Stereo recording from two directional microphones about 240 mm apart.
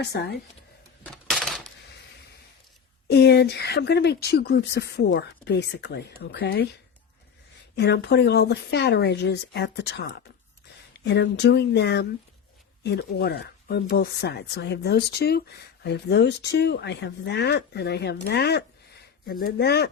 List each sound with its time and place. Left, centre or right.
0.0 s speech: left
1.0 s a sound: centre
3.1 s speech: left
7.8 s speech: left